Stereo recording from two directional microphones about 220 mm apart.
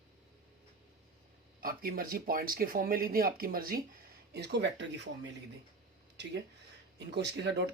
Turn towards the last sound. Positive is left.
turn(degrees=-50)  # may be behind; listen again after turning